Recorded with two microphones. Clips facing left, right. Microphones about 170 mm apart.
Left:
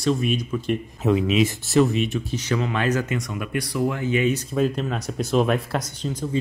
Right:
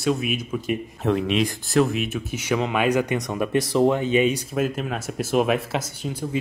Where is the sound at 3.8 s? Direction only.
20° right (ahead or behind).